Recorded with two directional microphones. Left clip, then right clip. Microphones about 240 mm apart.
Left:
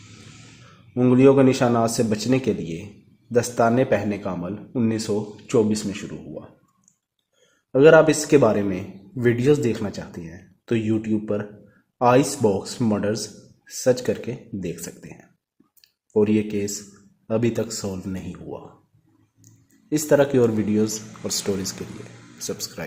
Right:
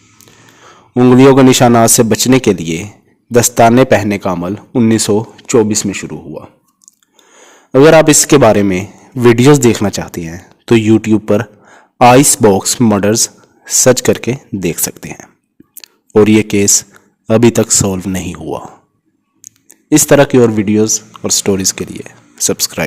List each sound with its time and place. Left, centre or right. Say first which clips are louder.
0.9 s a man's voice: right 10 dB; right
7.7 s a man's voice: right 8 dB; right
15.7 s a sound: right 12 dB; right
17.2 s speech: right 14 dB; right